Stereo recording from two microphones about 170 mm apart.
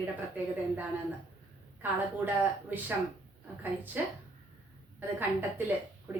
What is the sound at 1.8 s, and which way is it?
A woman's voice, 10° right (ahead or behind).